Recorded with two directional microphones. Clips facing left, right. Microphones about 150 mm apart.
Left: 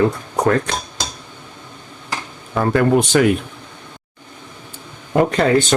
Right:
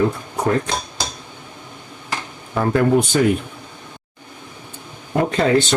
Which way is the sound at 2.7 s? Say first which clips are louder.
Left 2 dB; 90° left.